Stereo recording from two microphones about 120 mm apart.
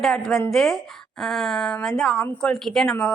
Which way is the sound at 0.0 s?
Centre (ahead or behind).